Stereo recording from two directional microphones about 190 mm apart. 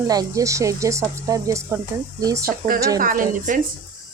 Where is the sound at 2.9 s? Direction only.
50° right (ahead or behind).